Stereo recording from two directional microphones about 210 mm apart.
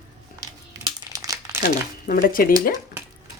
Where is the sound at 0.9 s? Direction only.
15° right (ahead or behind).